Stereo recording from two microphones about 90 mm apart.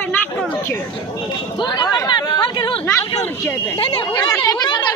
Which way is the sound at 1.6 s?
55° left (ahead or behind).